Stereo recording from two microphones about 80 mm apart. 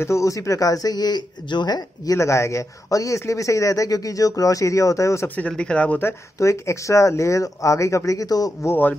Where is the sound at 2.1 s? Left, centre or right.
Left.